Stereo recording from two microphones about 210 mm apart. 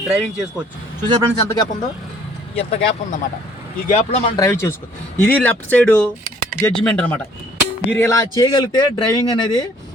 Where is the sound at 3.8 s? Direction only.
30° left (ahead or behind).